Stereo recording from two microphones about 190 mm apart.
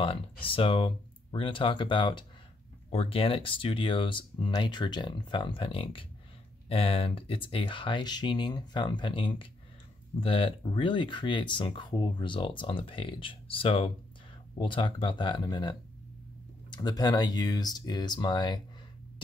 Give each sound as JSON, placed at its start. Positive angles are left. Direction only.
{"t": 0.0, "sound": "speech", "side_deg": 30}
{"t": 16.7, "sound": "speech", "side_deg": 20}